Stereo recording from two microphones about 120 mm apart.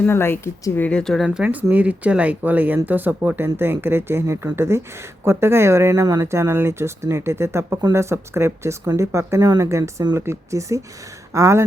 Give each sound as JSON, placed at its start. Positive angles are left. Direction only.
{"t": 0.0, "sound": "speech", "side_deg": 20}